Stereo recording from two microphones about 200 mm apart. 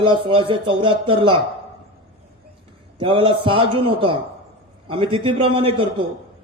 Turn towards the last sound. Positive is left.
turn(degrees=-25)  # may be behind; listen again after turning